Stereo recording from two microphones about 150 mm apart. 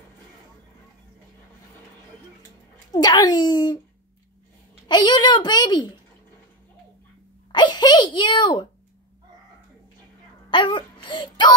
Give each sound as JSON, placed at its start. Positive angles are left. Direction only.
{"t": 2.9, "sound": "a child's voice", "side_deg": 25}
{"t": 4.8, "sound": "a child's voice", "side_deg": 30}
{"t": 7.5, "sound": "a sound", "side_deg": 30}
{"t": 10.5, "sound": "speech", "side_deg": 35}